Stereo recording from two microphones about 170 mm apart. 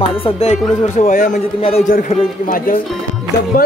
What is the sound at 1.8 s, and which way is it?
Speech, 55° left (ahead or behind).